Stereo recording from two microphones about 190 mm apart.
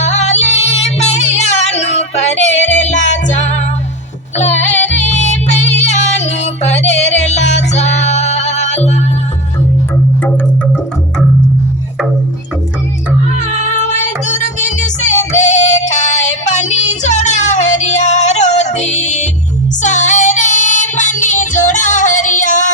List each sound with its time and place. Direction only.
0.0 s music: 35° left (ahead or behind)
13.4 s music: 40° left (ahead or behind)
19.8 s child singing: 40° left (ahead or behind)